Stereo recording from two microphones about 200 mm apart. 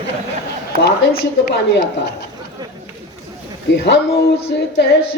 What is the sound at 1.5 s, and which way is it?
Speech, 55° left (ahead or behind).